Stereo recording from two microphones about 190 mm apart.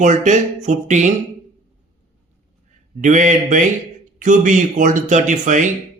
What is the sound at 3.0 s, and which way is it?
Speech, 40° right (ahead or behind).